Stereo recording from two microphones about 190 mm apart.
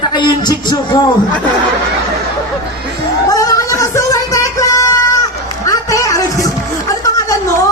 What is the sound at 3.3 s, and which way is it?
Music, 15° left (ahead or behind).